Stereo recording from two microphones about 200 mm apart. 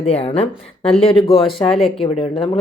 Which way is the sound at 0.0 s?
30° left (ahead or behind).